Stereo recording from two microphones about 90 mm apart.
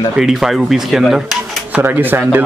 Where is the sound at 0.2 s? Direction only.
5° right (ahead or behind).